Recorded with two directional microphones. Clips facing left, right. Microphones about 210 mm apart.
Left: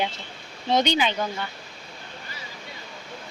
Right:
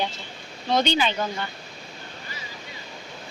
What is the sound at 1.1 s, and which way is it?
Speech, 5° right (ahead or behind).